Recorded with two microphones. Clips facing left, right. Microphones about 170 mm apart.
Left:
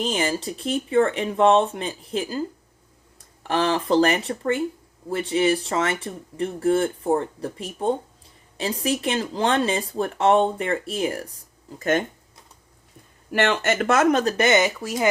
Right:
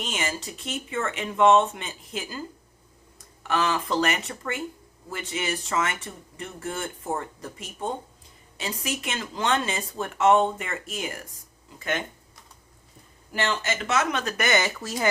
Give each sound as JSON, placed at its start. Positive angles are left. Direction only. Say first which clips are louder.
{"t": 0.0, "sound": "speech", "louder": "left 7 dB", "side_deg": 35}
{"t": 3.4, "sound": "speech", "louder": "left 4 dB", "side_deg": 35}
{"t": 11.8, "sound": "speech", "louder": "left 8 dB", "side_deg": 45}
{"t": 13.3, "sound": "speech", "louder": "left 7 dB", "side_deg": 65}
{"t": 14.3, "sound": "speech", "louder": "left 6 dB", "side_deg": 20}